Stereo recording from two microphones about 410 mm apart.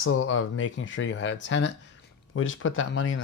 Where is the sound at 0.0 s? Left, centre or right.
Left.